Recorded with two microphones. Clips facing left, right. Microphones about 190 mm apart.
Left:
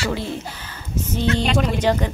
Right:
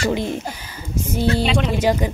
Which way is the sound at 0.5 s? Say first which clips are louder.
Right 1 dB; 15° right (ahead or behind).